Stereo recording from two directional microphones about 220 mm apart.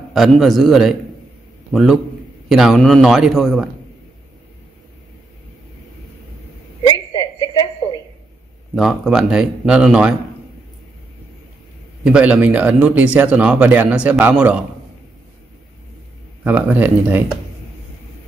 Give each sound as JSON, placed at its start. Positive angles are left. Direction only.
{"t": 0.1, "sound": "a man's voice", "side_deg": 0}
{"t": 6.9, "sound": "a sound", "side_deg": 15}
{"t": 8.7, "sound": "speech", "side_deg": 0}
{"t": 12.0, "sound": "a man's voice", "side_deg": -5}
{"t": 16.4, "sound": "a man's voice", "side_deg": -5}